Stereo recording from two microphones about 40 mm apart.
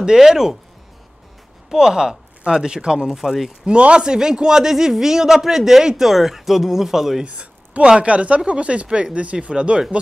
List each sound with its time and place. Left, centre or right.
0.0 s speech: centre
1.7 s speech: centre
3.1 s speech: centre
3.6 s speech: right; by 7.2 s centre
7.2 s a sound: right
8.0 s speech: right